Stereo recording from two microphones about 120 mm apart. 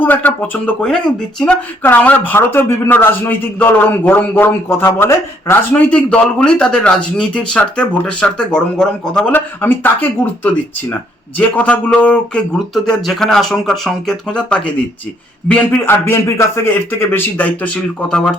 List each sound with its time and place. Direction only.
0.0 s speech: 15° left (ahead or behind)
1.8 s speech: 15° left (ahead or behind)
9.3 s speech: 15° left (ahead or behind)